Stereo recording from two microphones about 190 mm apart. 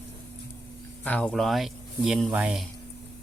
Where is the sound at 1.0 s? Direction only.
5° left (ahead or behind).